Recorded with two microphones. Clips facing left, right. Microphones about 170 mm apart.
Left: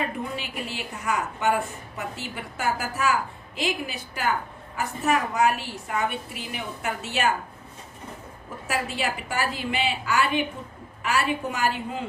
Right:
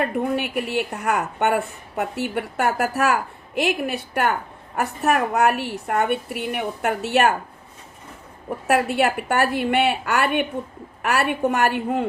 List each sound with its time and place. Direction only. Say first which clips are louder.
0.0 s a woman's voice: right 8 dB; 60° right (ahead or behind)
8.4 s a woman's voice: right 9 dB; 65° right (ahead or behind)